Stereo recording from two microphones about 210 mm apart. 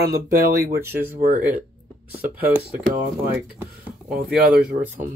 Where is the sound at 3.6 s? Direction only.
5° right (ahead or behind).